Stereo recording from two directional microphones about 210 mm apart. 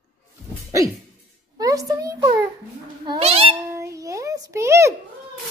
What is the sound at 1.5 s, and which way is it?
A child's voice, 15° right (ahead or behind).